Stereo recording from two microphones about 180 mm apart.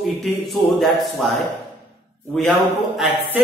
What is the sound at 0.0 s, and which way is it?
Speech, centre (ahead or behind).